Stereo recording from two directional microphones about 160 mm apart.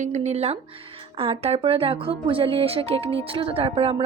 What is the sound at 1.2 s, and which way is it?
Speech, 40° right (ahead or behind).